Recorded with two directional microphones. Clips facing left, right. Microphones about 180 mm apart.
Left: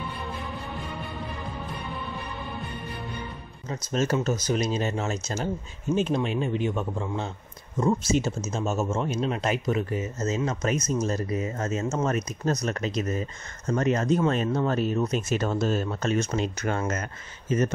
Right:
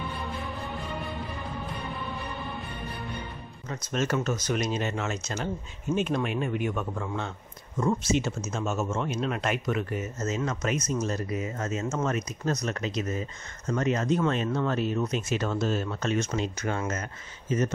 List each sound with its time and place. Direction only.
3.6 s a man's voice: 30° left (ahead or behind); by 17.6 s 60° left (ahead or behind)